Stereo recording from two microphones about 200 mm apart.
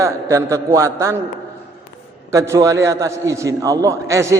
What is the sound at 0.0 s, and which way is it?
A man's voice, 15° right (ahead or behind).